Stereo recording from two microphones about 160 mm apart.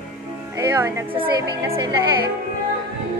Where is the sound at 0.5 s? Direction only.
20° right (ahead or behind).